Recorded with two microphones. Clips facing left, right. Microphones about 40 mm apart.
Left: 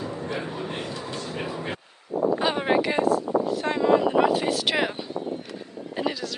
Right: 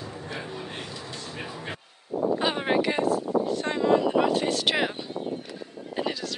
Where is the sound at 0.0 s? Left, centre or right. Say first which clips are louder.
Left 5 dB; left.